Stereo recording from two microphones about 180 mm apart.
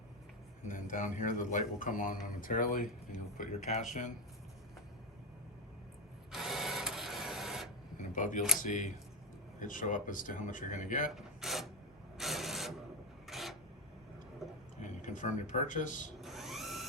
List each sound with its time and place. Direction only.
0.7 s speech: 45° left (ahead or behind)
6.3 s printer: centre (ahead or behind)
8.1 s speech: 45° left (ahead or behind)
11.1 s mechanisms: centre (ahead or behind)
12.1 s printer: centre (ahead or behind)
13.2 s rub: centre (ahead or behind)
14.4 s a sound: centre (ahead or behind)
14.8 s speech: 45° left (ahead or behind)
16.2 s tools: centre (ahead or behind)